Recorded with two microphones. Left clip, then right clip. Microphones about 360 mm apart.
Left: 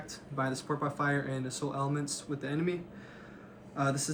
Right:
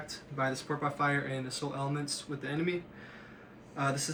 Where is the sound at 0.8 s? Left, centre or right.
Centre.